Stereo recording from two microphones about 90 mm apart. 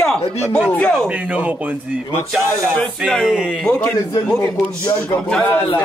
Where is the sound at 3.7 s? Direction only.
15° left (ahead or behind).